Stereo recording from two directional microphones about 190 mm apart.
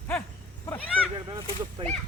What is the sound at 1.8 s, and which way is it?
Whip, 25° right (ahead or behind).